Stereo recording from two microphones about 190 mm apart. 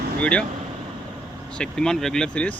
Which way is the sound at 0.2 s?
5° left (ahead or behind).